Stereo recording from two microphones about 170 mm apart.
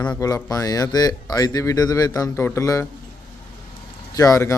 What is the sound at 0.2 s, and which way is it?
Speech, 20° left (ahead or behind).